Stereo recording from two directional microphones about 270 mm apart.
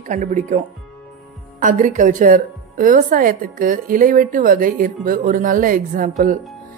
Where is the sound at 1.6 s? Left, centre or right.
Right.